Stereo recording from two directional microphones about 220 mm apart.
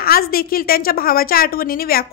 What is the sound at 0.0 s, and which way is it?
A woman's voice, 40° left (ahead or behind).